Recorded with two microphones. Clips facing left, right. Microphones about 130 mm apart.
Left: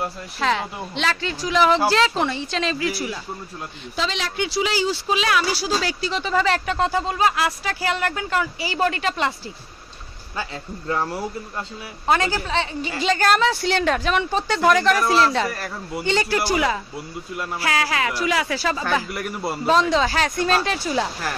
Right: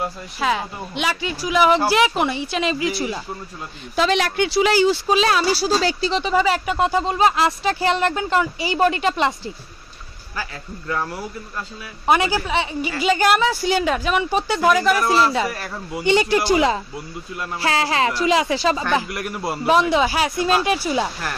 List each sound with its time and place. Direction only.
0.0 s speech: 5° right (ahead or behind); by 3.2 s 25° right (ahead or behind)
3.9 s speech: 55° right (ahead or behind)
5.1 s speech: 35° right (ahead or behind)
6.3 s speech: 10° right (ahead or behind)
10.3 s a man's voice: 25° left (ahead or behind)
12.1 s speech: 15° right (ahead or behind)
16.0 s speech: 15° right (ahead or behind)
19.1 s speech: centre (ahead or behind)
19.7 s speech: 10° right (ahead or behind)